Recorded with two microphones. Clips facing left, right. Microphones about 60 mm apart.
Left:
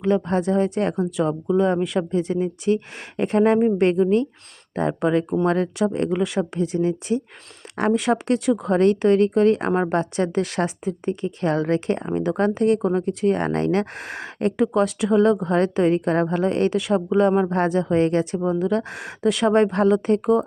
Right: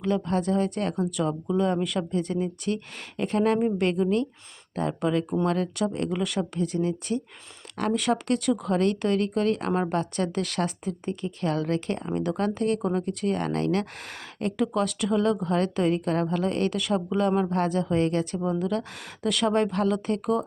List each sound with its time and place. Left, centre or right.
0.0 s speech: left